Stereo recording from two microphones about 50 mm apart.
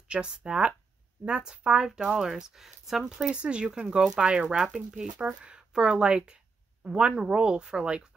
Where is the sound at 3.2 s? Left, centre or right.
Right.